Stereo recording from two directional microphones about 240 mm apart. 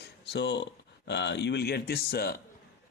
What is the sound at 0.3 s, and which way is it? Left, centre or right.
Speech, left.